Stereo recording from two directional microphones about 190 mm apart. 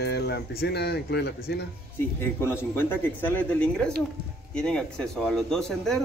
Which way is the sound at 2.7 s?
10° left (ahead or behind).